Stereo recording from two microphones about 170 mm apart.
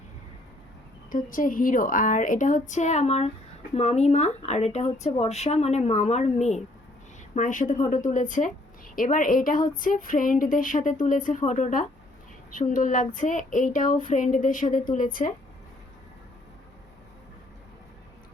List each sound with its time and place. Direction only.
1.1 s a woman's voice: 50° left (ahead or behind)